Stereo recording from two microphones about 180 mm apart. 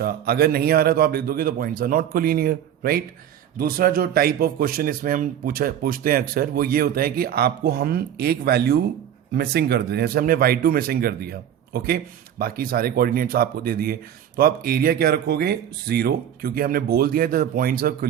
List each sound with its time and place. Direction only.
0.0 s speech: 60° right (ahead or behind)